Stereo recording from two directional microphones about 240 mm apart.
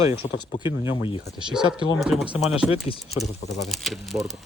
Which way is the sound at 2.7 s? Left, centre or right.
Left.